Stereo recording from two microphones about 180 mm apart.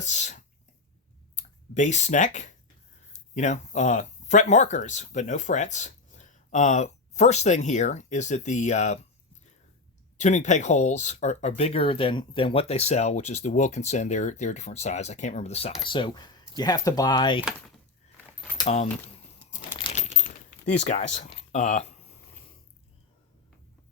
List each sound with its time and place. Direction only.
0.0 s a sound: 40° left (ahead or behind)
1.4 s speech: 45° left (ahead or behind)
10.2 s speech: 40° left (ahead or behind); by 17.4 s 25° left (ahead or behind)
18.6 s speech: 40° left (ahead or behind)
19.8 s coin: 40° left (ahead or behind)
21.2 s a sound: 35° left (ahead or behind)